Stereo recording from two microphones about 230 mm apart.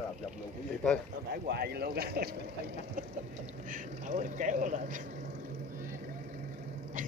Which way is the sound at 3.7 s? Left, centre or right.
Right.